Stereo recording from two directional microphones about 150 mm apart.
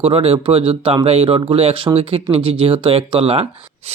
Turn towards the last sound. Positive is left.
turn(degrees=-35)  # may be behind; listen again after turning